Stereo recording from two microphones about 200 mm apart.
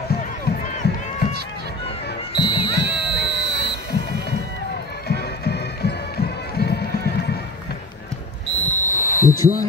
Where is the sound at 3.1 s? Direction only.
55° left (ahead or behind).